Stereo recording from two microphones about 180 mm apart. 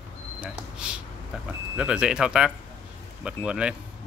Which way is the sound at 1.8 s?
5° right (ahead or behind).